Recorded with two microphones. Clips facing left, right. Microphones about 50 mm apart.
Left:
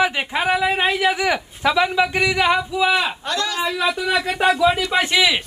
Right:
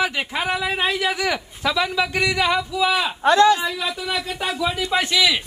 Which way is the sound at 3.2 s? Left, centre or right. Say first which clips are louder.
Right 10 dB; right.